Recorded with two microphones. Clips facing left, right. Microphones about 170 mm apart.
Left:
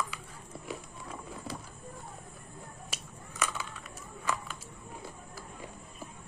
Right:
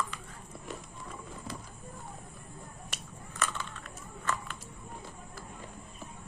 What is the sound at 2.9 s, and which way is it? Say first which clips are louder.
Crushing: even; 5° left (ahead or behind).